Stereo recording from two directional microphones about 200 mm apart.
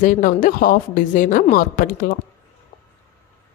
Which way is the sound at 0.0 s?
40° left (ahead or behind).